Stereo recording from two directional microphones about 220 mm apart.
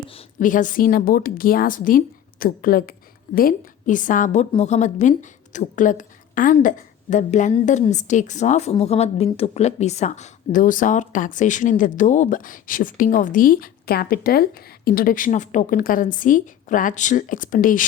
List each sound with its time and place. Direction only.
0.1 s a woman's voice: 30° left (ahead or behind)